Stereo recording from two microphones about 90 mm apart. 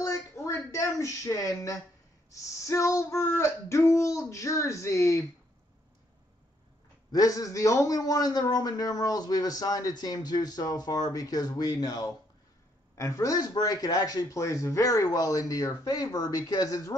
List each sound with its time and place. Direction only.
0.0 s a sound: 35° left (ahead or behind)
2.3 s a man's voice: 35° left (ahead or behind)
7.1 s a man's voice: 40° left (ahead or behind)